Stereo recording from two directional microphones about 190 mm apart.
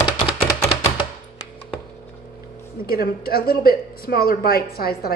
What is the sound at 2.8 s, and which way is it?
A woman's voice, 50° left (ahead or behind).